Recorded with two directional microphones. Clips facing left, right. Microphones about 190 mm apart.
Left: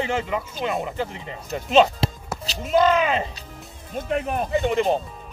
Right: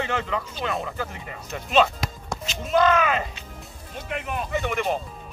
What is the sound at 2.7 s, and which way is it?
Speech, 20° left (ahead or behind).